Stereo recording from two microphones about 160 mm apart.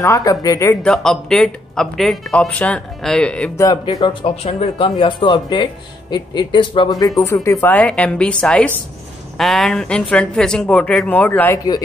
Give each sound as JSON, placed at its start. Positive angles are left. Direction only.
{"t": 0.0, "sound": "speech", "side_deg": 20}
{"t": 0.8, "sound": "speech", "side_deg": 0}
{"t": 3.6, "sound": "speech", "side_deg": 25}
{"t": 7.4, "sound": "a woman's voice", "side_deg": 10}